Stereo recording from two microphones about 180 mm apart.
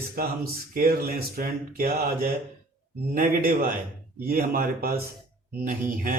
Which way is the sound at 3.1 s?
50° right (ahead or behind).